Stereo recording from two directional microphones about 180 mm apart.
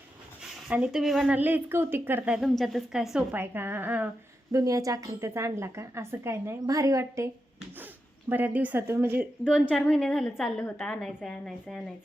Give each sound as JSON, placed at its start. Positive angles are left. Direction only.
{"t": 0.7, "sound": "speech", "side_deg": -5}
{"t": 8.3, "sound": "speech", "side_deg": -10}
{"t": 9.4, "sound": "a woman's voice", "side_deg": 5}